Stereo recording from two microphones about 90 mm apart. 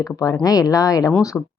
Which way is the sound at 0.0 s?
40° left (ahead or behind).